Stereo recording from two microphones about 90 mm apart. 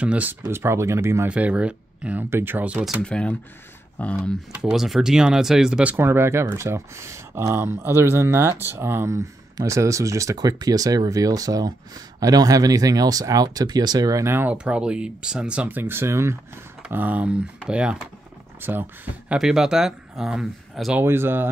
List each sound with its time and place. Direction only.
0.0 s speech: 15° right (ahead or behind)
0.5 s speech: 30° right (ahead or behind)
1.3 s speech: 15° right (ahead or behind)
2.2 s speech: 25° right (ahead or behind)
3.0 s speech: 10° left (ahead or behind)
4.5 s speech: 10° right (ahead or behind)
5.9 s speech: 25° right (ahead or behind); by 14.2 s 45° right (ahead or behind)
14.2 s speech: 25° right (ahead or behind)
14.5 s speech: 10° right (ahead or behind); by 16.3 s 30° right (ahead or behind)
16.9 s speech: 20° right (ahead or behind)
18.6 s speech: 20° right (ahead or behind)
19.3 s speech: 5° right (ahead or behind)
21.0 s speech: 25° right (ahead or behind)